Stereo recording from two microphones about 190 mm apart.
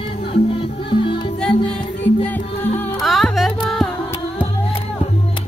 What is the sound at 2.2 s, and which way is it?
Music, 10° left (ahead or behind).